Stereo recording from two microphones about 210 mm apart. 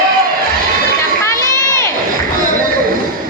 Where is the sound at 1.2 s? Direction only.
15° left (ahead or behind).